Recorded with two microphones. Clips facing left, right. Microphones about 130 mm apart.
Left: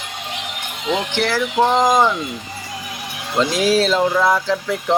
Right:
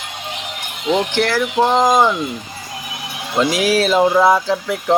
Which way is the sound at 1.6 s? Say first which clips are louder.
Right 1 dB; 20° right (ahead or behind).